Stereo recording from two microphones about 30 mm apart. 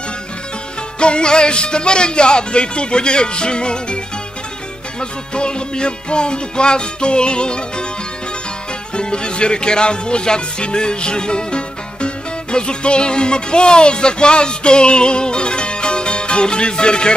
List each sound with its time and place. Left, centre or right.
0.9 s speech: left
5.3 s speech: left
8.9 s music: left